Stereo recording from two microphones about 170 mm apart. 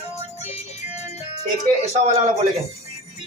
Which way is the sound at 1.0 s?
40° left (ahead or behind).